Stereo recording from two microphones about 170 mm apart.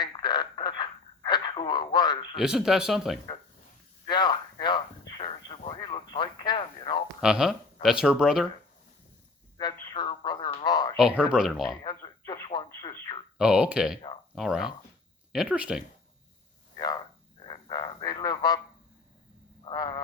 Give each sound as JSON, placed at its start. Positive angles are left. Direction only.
{"t": 0.0, "sound": "radio", "side_deg": 25}
{"t": 2.4, "sound": "speech", "side_deg": -5}
{"t": 4.0, "sound": "radio", "side_deg": 25}
{"t": 7.2, "sound": "speech", "side_deg": -5}
{"t": 9.6, "sound": "a sound", "side_deg": 25}
{"t": 10.9, "sound": "speech", "side_deg": -5}
{"t": 11.7, "sound": "radio", "side_deg": 25}
{"t": 13.4, "sound": "speech", "side_deg": -5}
{"t": 16.7, "sound": "a sound", "side_deg": 25}
{"t": 19.6, "sound": "a sound", "side_deg": 25}